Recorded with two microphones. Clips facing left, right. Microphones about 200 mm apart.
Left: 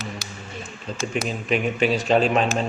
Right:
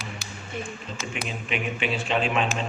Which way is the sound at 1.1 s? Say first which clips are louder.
Left 7 dB; 40° left (ahead or behind).